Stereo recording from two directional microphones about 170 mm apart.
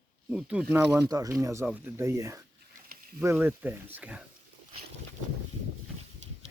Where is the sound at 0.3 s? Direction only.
5° right (ahead or behind).